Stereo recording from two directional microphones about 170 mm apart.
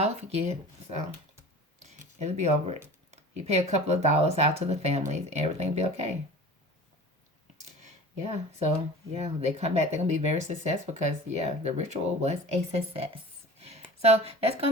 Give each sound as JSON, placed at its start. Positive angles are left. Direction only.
{"t": 0.0, "sound": "speech", "side_deg": -40}
{"t": 7.8, "sound": "a sound", "side_deg": -40}
{"t": 9.1, "sound": "speech", "side_deg": -40}